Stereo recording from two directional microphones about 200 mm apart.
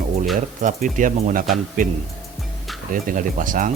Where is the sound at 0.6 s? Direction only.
40° right (ahead or behind).